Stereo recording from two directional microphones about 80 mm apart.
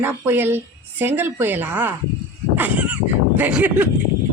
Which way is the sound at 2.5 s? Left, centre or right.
Right.